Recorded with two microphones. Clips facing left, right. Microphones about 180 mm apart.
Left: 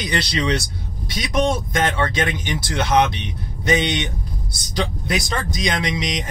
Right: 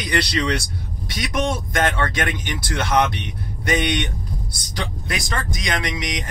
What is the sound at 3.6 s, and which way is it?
Speech, 25° left (ahead or behind).